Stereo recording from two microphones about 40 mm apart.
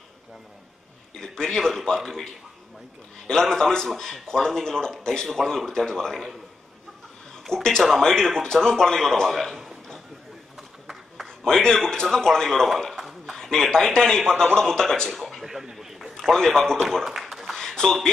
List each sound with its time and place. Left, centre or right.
1.1 s speech: centre
3.3 s speech: centre
7.4 s speech: centre
9.3 s a man's voice: centre
11.2 s speech: centre
12.9 s a sound: centre
13.4 s speech: centre
15.0 s speech: centre
15.6 s a sound: centre
16.2 s speech: centre
17.0 s a sound: centre
17.6 s a sound: centre